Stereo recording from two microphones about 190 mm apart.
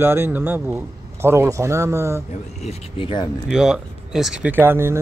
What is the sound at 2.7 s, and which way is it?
Speech, 25° left (ahead or behind).